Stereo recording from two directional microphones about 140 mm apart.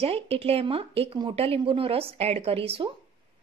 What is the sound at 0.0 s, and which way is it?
A woman's voice, 45° right (ahead or behind).